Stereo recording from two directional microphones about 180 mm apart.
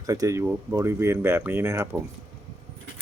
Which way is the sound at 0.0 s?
20° right (ahead or behind).